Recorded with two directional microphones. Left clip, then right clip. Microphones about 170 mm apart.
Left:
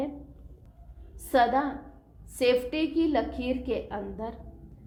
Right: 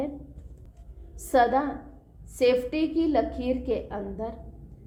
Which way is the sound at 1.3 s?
40° right (ahead or behind).